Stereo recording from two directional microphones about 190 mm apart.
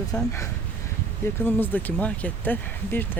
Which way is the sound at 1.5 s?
10° left (ahead or behind).